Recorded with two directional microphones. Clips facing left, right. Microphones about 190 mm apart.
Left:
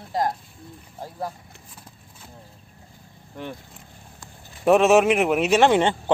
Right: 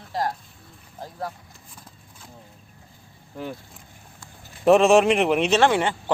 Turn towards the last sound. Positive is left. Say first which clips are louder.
# left 2 dB
turn(degrees=20)  # may be behind; listen again after turning